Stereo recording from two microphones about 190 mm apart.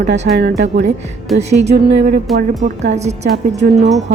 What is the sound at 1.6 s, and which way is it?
Speech, 35° right (ahead or behind).